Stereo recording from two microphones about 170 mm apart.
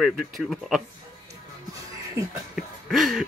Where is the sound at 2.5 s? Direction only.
Centre (ahead or behind).